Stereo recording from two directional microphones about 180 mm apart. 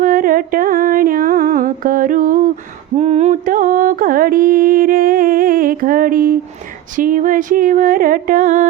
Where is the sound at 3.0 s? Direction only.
40° right (ahead or behind).